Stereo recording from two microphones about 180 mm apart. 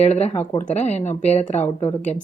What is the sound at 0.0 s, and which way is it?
A woman's voice, 35° left (ahead or behind).